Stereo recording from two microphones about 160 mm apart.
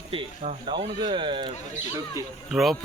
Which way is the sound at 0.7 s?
30° right (ahead or behind).